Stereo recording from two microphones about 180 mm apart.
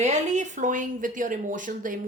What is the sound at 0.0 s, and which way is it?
Speech, 40° right (ahead or behind).